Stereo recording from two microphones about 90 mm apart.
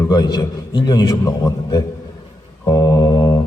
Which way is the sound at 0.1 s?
50° left (ahead or behind).